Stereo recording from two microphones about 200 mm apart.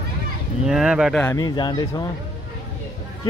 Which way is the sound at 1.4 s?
20° left (ahead or behind).